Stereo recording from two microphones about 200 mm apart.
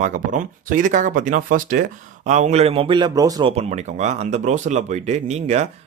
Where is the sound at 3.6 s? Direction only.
35° right (ahead or behind).